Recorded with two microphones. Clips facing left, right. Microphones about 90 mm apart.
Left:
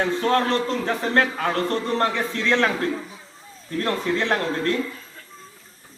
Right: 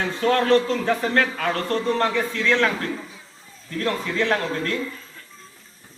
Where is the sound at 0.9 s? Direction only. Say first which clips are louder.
Even; 30° left (ahead or behind).